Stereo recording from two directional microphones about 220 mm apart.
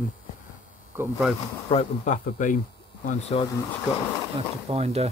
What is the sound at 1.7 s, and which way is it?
Speech, 30° left (ahead or behind).